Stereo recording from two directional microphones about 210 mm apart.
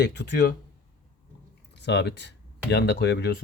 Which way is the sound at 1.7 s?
55° left (ahead or behind).